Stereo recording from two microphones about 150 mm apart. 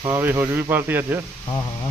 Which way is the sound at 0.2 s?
15° right (ahead or behind).